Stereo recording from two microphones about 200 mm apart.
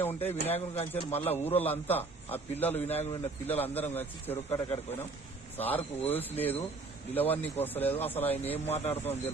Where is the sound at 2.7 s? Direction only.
30° left (ahead or behind).